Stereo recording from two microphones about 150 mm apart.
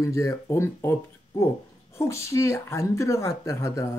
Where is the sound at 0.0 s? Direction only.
20° left (ahead or behind).